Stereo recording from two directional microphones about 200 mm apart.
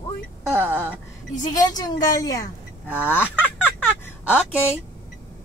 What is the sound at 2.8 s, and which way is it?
Speech, 10° right (ahead or behind).